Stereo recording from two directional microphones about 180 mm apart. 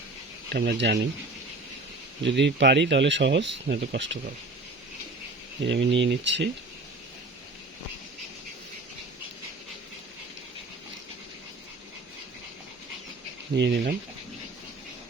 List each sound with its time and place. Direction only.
0.5 s speech: 65° right (ahead or behind)
2.2 s speech: 75° right (ahead or behind)
5.6 s speech: 85° right
13.6 s speech: 65° right (ahead or behind)